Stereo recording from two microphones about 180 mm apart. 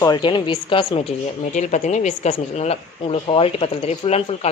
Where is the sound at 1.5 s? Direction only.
40° left (ahead or behind).